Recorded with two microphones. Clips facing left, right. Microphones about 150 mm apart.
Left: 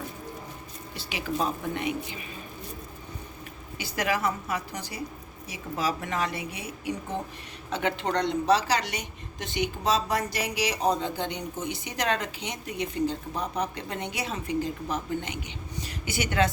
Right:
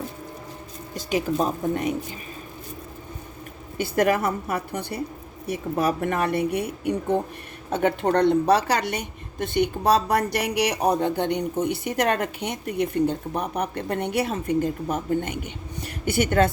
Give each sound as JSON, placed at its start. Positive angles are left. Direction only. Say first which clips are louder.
{"t": 0.9, "sound": "speech", "louder": "right 7 dB", "side_deg": -40}
{"t": 3.8, "sound": "a woman's voice", "louder": "right 7 dB", "side_deg": -55}